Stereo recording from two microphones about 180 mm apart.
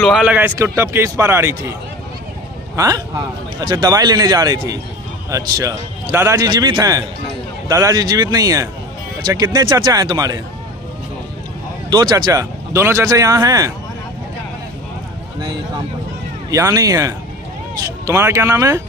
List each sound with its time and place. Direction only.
0.0 s a man's voice: 5° right (ahead or behind); by 10.4 s 20° right (ahead or behind)
11.9 s a man's voice: 20° right (ahead or behind)
16.4 s a man's voice: 15° right (ahead or behind)